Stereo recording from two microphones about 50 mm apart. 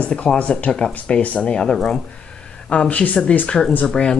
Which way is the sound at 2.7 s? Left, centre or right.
Left.